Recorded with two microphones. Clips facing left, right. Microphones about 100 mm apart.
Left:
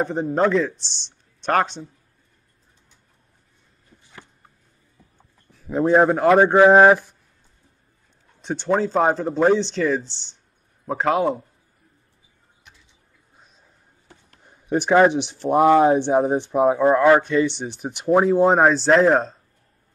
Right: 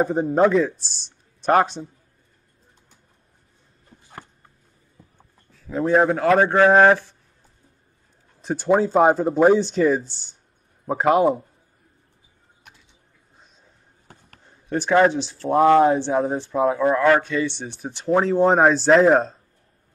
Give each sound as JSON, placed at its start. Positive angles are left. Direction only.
{"t": 0.0, "sound": "speech", "side_deg": -5}
{"t": 5.5, "sound": "speech", "side_deg": 20}
{"t": 8.4, "sound": "speech", "side_deg": -5}
{"t": 14.4, "sound": "speech", "side_deg": 15}